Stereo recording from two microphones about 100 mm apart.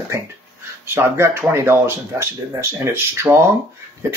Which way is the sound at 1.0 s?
25° right (ahead or behind).